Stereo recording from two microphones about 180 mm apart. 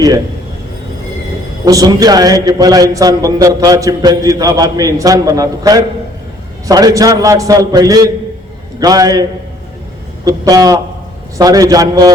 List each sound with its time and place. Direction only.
1.6 s a man's voice: 20° right (ahead or behind)
10.2 s a man's voice: 20° right (ahead or behind)